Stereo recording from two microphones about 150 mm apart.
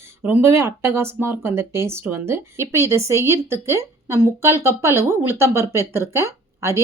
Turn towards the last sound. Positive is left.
turn(degrees=-15)  # may be behind; listen again after turning